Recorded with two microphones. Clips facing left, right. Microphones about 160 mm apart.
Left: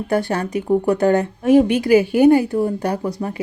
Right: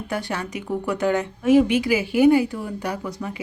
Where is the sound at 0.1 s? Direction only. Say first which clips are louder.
Left 8 dB; 50° left (ahead or behind).